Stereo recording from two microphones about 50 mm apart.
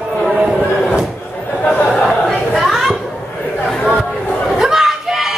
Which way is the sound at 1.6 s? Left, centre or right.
Left.